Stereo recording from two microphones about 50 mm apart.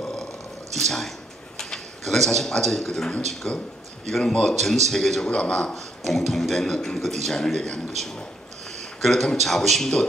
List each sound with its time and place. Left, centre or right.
0.0 s a sound: centre
0.7 s a man's voice: centre
3.1 s a man's voice: centre
4.6 s a man's voice: centre
6.0 s a man's voice: centre